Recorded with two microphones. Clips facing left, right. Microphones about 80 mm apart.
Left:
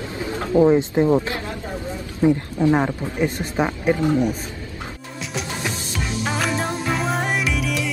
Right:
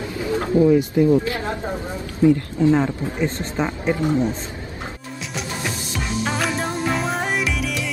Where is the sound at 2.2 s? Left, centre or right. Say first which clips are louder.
Right 2 dB; left.